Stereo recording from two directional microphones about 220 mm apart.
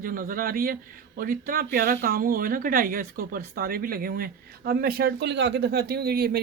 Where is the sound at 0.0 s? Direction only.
40° right (ahead or behind).